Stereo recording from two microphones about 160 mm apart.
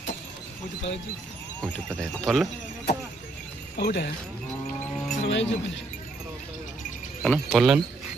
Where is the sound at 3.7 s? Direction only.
90° left.